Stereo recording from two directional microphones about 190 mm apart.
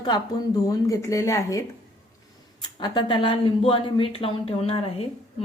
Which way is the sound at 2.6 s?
20° left (ahead or behind).